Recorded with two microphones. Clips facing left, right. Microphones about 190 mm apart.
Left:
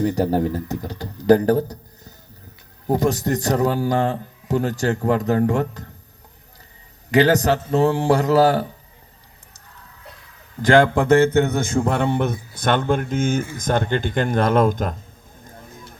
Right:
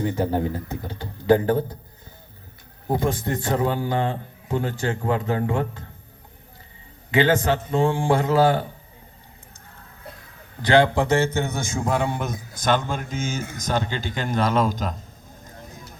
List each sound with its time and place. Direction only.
0.0 s a man's voice: 40° left (ahead or behind)
7.1 s a man's voice: 40° left (ahead or behind)
10.6 s a man's voice: 50° left (ahead or behind)